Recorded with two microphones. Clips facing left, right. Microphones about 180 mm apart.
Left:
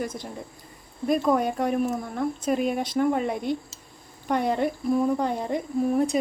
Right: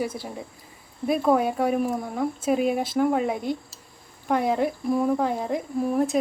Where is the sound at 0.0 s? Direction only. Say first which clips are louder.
Right 2 dB; 5° right (ahead or behind).